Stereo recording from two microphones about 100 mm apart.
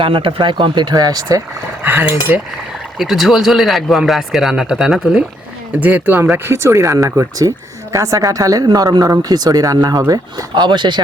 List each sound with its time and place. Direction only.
0.0 s speech: 60° right (ahead or behind); by 1.4 s 40° right (ahead or behind)
1.8 s cutlery: 20° right (ahead or behind)
3.0 s speech: centre (ahead or behind)
5.8 s speech: 20° right (ahead or behind); by 11.0 s 50° right (ahead or behind)